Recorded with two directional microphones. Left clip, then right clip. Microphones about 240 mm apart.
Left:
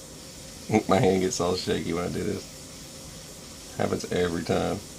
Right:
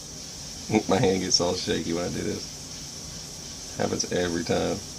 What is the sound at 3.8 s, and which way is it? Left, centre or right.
Speech, centre.